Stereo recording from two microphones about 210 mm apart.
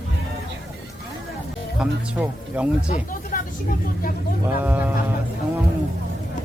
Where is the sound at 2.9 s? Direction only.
40° left (ahead or behind).